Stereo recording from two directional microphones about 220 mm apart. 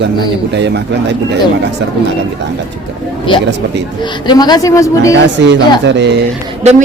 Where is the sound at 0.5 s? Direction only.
50° right (ahead or behind).